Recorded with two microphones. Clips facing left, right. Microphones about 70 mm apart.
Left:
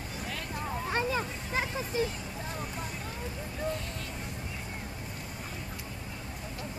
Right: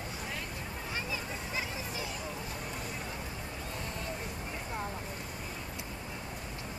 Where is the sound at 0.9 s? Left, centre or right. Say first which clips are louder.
Left 7 dB; left.